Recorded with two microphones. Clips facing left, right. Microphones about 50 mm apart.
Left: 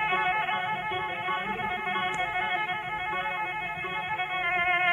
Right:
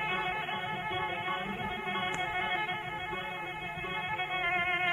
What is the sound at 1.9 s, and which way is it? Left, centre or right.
Music, centre.